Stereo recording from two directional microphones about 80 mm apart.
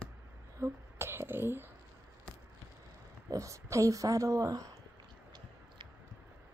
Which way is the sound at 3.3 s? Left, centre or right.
Right.